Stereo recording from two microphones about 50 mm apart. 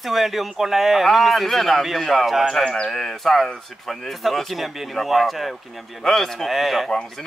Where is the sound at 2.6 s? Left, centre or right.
Centre.